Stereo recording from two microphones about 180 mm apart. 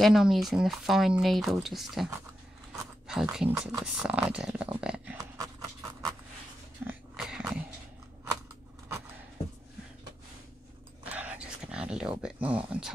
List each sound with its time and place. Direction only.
0.0 s speech: centre (ahead or behind)
2.7 s a sound: 5° right (ahead or behind)
3.8 s speech: 5° right (ahead or behind)
5.1 s pant: 20° right (ahead or behind)
6.9 s dog: 5° right (ahead or behind)
11.1 s dog: 10° right (ahead or behind)